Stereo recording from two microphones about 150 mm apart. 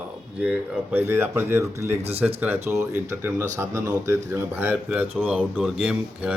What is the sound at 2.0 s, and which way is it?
Speech, 40° right (ahead or behind).